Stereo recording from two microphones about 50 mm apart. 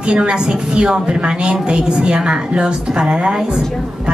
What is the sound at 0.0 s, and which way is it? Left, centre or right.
A woman's voice, centre.